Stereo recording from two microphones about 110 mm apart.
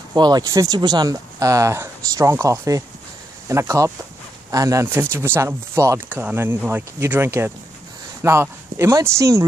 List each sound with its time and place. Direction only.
0.1 s speech: 40° right (ahead or behind)
5.1 s speech: 20° right (ahead or behind)